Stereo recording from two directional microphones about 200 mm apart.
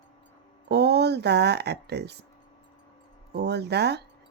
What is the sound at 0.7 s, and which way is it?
Speech, 55° right (ahead or behind).